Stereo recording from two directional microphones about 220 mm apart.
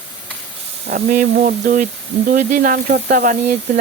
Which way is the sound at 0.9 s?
35° right (ahead or behind).